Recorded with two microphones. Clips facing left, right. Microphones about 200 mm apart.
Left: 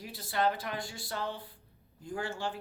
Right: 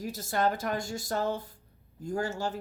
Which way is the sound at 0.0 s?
45° right (ahead or behind).